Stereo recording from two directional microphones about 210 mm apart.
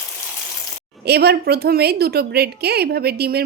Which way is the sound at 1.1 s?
50° right (ahead or behind).